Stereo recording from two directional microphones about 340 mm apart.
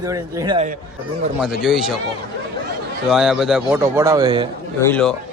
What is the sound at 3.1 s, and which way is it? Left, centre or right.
A man's voice, centre.